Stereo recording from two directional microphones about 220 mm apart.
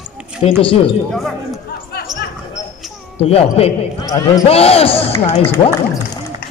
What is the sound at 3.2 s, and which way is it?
Speech, 25° left (ahead or behind).